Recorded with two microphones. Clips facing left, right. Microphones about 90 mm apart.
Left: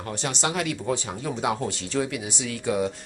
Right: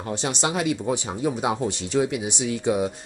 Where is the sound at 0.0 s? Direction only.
20° right (ahead or behind).